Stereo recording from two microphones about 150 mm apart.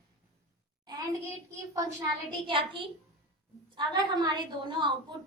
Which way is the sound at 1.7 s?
30° right (ahead or behind).